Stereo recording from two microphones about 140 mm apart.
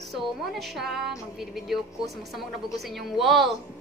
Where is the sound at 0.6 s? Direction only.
Centre (ahead or behind).